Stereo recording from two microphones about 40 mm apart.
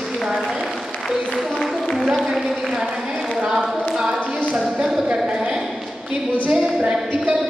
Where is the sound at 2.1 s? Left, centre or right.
Centre.